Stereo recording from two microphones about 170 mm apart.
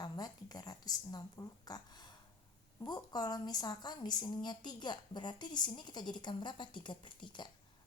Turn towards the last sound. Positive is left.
turn(degrees=25)  # may be behind; listen again after turning